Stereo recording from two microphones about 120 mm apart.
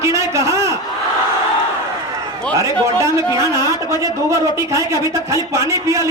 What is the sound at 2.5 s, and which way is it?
A man's voice, 25° right (ahead or behind).